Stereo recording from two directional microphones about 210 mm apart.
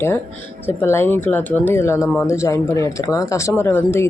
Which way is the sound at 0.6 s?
10° left (ahead or behind).